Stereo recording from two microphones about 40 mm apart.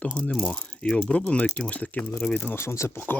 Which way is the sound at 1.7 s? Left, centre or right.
Left.